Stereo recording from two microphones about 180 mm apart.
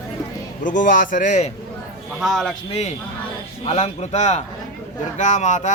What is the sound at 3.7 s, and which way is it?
Speech, 40° left (ahead or behind).